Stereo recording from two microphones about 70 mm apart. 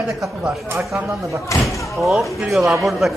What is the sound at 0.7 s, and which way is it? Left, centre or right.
Speech, right.